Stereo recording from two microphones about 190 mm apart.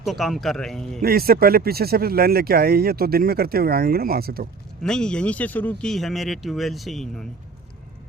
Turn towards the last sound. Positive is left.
turn(degrees=0)  # may be behind; listen again after turning